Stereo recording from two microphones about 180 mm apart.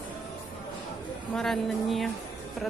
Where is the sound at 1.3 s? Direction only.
5° left (ahead or behind).